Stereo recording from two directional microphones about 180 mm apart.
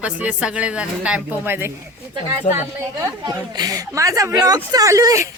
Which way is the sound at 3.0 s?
20° right (ahead or behind).